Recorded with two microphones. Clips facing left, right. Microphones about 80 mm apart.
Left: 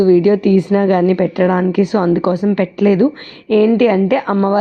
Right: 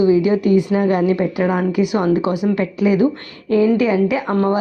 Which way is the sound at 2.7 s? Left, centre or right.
Left.